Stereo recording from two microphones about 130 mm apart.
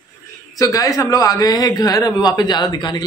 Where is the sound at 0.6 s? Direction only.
25° left (ahead or behind).